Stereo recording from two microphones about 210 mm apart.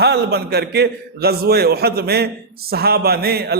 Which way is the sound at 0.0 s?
50° right (ahead or behind).